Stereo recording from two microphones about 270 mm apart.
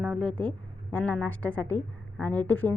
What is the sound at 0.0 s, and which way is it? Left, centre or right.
A woman's voice, centre.